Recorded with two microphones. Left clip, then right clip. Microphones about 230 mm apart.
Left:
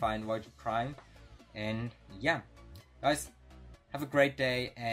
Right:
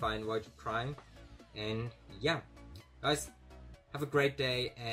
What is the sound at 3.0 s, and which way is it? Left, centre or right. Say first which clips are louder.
Speech: left 3 dB; left.